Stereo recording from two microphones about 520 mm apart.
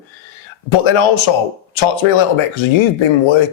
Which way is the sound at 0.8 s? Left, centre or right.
Left.